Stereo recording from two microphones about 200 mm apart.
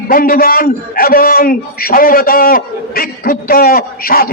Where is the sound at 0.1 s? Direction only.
45° left (ahead or behind).